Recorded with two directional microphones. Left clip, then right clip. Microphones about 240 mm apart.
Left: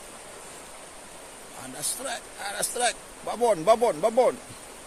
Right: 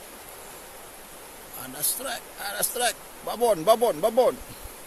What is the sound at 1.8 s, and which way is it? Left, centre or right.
Speech, centre.